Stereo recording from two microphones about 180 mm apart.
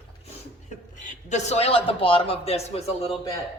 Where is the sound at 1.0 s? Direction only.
40° left (ahead or behind).